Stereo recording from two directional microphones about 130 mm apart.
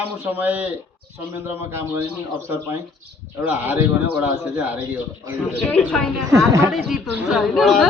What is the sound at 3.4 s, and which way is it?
Speech, 15° right (ahead or behind).